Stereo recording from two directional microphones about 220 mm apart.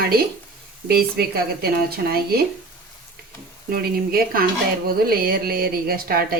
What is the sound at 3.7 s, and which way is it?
Speech, 45° right (ahead or behind).